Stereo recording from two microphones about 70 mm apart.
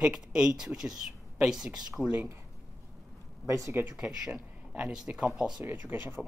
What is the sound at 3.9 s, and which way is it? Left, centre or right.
Speech, centre.